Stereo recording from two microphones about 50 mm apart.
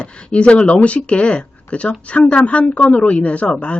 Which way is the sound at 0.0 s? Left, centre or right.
Left.